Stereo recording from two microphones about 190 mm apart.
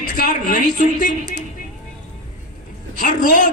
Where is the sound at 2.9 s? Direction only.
45° left (ahead or behind).